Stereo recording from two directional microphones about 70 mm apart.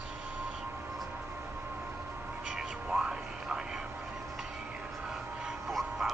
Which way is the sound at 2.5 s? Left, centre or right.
Centre.